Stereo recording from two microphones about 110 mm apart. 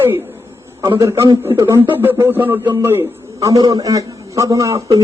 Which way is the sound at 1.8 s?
20° right (ahead or behind).